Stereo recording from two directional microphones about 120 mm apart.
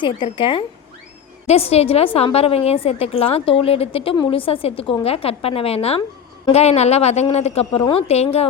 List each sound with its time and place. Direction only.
0.3 s a woman's voice: 45° left (ahead or behind)
1.5 s a woman's voice: 60° left (ahead or behind)